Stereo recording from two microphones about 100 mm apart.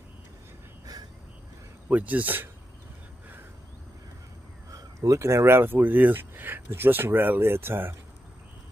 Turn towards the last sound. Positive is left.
turn(degrees=-25)  # may be behind; listen again after turning